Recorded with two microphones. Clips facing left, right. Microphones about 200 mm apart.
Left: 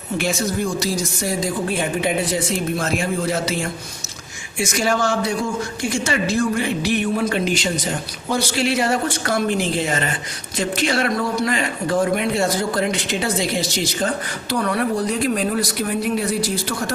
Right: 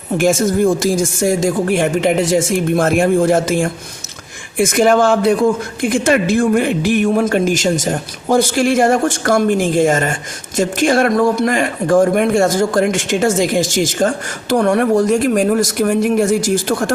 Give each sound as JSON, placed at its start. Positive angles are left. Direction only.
{"t": 0.2, "sound": "a man's voice", "side_deg": -50}